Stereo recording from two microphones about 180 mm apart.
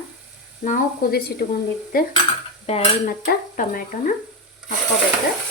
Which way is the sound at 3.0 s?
55° left (ahead or behind).